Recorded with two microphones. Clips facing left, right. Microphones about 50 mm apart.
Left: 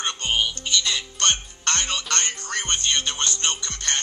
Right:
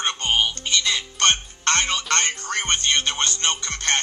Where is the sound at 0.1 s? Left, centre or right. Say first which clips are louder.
Right 1 dB; right.